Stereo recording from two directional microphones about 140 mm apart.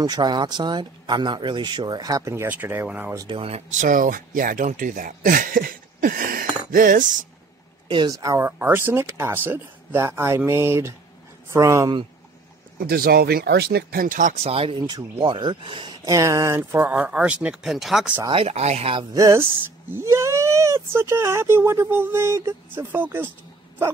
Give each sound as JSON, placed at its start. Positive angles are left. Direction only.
{"t": 0.0, "sound": "speech", "side_deg": -30}
{"t": 3.2, "sound": "speech", "side_deg": -40}
{"t": 3.7, "sound": "speech", "side_deg": -65}
{"t": 8.1, "sound": "speech", "side_deg": -25}
{"t": 12.7, "sound": "speech", "side_deg": -90}
{"t": 14.4, "sound": "speech", "side_deg": -45}
{"t": 14.8, "sound": "speech", "side_deg": -30}
{"t": 16.2, "sound": "speech", "side_deg": -20}
{"t": 18.3, "sound": "speech", "side_deg": -45}
{"t": 19.1, "sound": "speech", "side_deg": -25}